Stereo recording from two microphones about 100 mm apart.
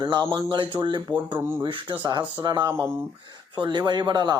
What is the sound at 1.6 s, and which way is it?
Speech, 55° right (ahead or behind).